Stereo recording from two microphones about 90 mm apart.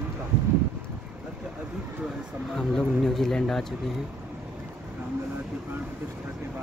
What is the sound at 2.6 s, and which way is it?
Speech, 5° left (ahead or behind).